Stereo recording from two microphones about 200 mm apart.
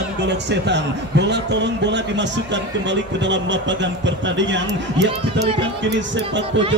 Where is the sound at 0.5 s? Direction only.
60° right (ahead or behind).